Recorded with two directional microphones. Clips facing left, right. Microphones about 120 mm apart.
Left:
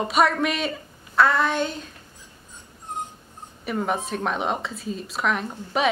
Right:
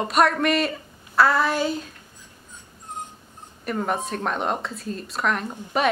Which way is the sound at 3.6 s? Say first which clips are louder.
Even; centre (ahead or behind).